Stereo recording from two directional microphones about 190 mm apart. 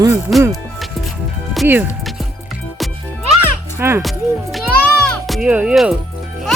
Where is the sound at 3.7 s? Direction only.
15° right (ahead or behind).